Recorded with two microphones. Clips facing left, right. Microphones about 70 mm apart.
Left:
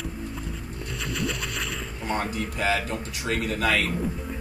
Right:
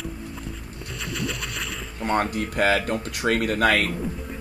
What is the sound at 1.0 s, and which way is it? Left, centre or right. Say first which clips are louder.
Music: even; centre.